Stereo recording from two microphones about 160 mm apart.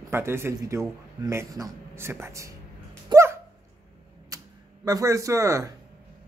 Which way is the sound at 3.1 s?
15° right (ahead or behind).